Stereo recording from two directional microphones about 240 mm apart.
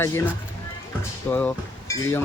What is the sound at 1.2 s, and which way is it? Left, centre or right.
Speech, centre.